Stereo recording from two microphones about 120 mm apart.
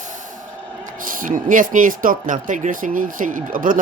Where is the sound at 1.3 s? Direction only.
90° right.